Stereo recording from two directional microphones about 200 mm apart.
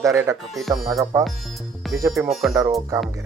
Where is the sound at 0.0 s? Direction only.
15° right (ahead or behind).